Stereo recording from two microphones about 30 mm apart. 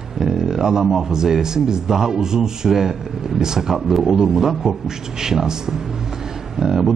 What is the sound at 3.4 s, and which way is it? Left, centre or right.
Speech, centre.